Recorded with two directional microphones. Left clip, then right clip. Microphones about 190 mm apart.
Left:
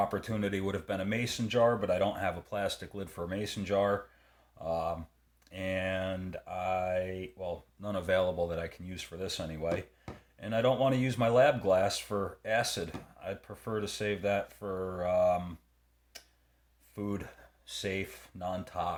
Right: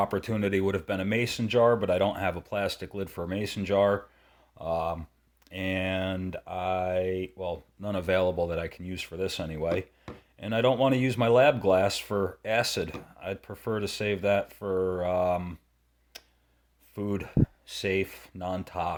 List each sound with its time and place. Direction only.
0.0 s speech: 45° right (ahead or behind)
16.9 s speech: 45° right (ahead or behind)